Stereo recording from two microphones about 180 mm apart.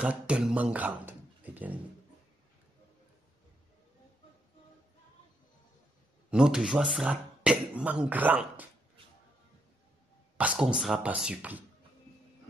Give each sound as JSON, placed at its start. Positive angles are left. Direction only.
{"t": 0.0, "sound": "speech", "side_deg": -5}
{"t": 6.3, "sound": "speech", "side_deg": -5}
{"t": 10.3, "sound": "speech", "side_deg": -5}